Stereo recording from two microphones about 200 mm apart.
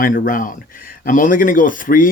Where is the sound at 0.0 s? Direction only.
40° left (ahead or behind).